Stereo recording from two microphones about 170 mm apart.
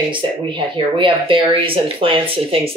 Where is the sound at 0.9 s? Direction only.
30° right (ahead or behind).